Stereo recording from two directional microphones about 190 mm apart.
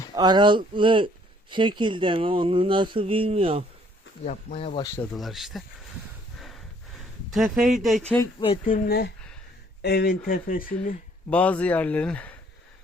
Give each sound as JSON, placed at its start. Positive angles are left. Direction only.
{"t": 0.1, "sound": "speech", "side_deg": -20}
{"t": 4.3, "sound": "speech", "side_deg": 35}
{"t": 4.9, "sound": "speech", "side_deg": 0}
{"t": 7.3, "sound": "speech", "side_deg": 0}
{"t": 8.4, "sound": "speech", "side_deg": 25}
{"t": 8.7, "sound": "speech", "side_deg": 55}
{"t": 11.3, "sound": "speech", "side_deg": 5}